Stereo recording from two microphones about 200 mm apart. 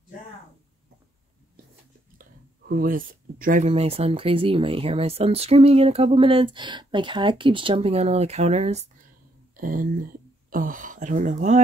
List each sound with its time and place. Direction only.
2.7 s speech: 45° right (ahead or behind)
9.6 s speech: 45° right (ahead or behind)